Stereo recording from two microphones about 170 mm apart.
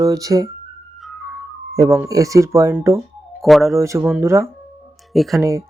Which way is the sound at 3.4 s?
Centre (ahead or behind).